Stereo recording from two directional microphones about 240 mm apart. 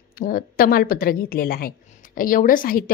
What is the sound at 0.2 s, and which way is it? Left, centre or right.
A woman's voice, left.